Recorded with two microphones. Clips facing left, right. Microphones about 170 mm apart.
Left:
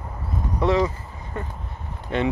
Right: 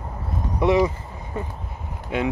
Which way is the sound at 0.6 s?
15° right (ahead or behind).